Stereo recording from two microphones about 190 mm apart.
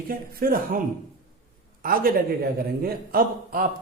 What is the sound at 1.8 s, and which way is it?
A man's voice, 50° right (ahead or behind).